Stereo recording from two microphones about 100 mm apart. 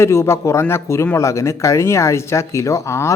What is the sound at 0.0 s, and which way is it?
Speech, 25° left (ahead or behind).